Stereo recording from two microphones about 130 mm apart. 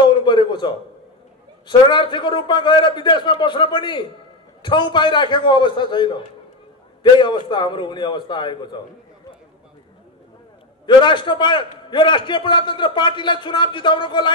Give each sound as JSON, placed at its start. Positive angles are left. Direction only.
{"t": 0.1, "sound": "a sound", "side_deg": 40}
{"t": 1.7, "sound": "a man's voice", "side_deg": 40}
{"t": 10.9, "sound": "a man's voice", "side_deg": 40}